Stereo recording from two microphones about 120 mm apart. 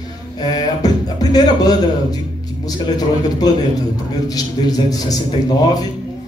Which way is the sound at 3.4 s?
35° left (ahead or behind).